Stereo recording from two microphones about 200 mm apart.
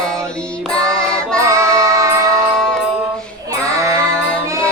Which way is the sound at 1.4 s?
15° right (ahead or behind).